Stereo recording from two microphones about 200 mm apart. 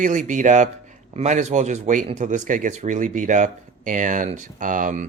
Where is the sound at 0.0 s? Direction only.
40° right (ahead or behind).